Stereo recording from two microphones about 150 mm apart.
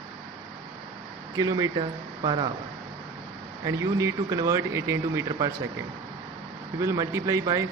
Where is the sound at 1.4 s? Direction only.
25° right (ahead or behind).